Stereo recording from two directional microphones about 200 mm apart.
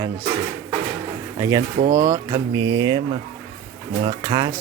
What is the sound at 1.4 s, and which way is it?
Speech, 15° right (ahead or behind).